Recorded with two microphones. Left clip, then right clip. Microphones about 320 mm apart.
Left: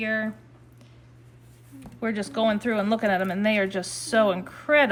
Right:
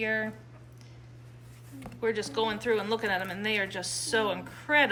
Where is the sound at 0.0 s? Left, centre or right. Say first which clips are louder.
Left 3 dB; centre.